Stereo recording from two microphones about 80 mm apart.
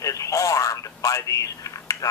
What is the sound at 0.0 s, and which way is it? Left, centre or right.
Speech, left.